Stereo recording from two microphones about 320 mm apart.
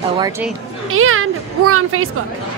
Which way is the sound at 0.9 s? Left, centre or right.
Right.